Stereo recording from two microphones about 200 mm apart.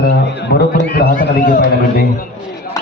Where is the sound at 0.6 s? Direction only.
50° left (ahead or behind).